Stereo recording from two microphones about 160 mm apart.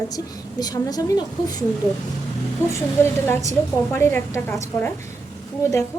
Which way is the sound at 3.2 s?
15° left (ahead or behind).